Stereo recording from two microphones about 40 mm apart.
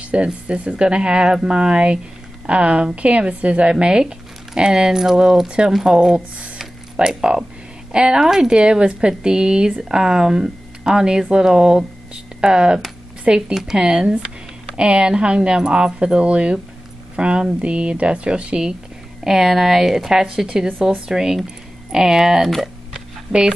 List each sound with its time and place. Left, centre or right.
0.0 s speech: right
3.7 s speech: centre
5.9 s speech: right
7.0 s speech: centre
14.0 s speech: right
19.2 s speech: centre